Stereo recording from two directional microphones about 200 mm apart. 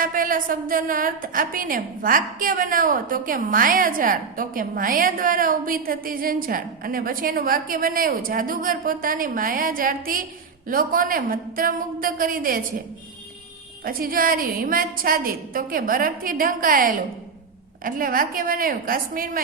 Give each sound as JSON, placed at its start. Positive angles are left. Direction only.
{"t": 0.0, "sound": "a woman's voice", "side_deg": -45}
{"t": 13.8, "sound": "a woman's voice", "side_deg": -45}